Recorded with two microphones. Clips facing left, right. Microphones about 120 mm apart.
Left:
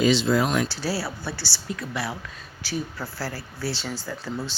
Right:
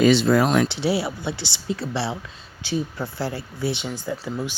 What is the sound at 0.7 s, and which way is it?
Speech, 20° right (ahead or behind).